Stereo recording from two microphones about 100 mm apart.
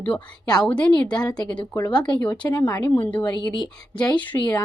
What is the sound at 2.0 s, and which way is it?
Speech, 50° left (ahead or behind).